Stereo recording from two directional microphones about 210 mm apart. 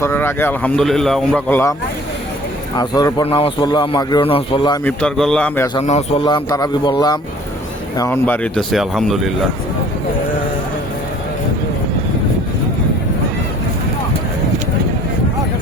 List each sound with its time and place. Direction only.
0.0 s a man's voice: 10° left (ahead or behind)
2.7 s a man's voice: 20° left (ahead or behind)
4.9 s speech: 5° left (ahead or behind)
5.8 s a man's voice: 30° left (ahead or behind); by 9.3 s centre (ahead or behind)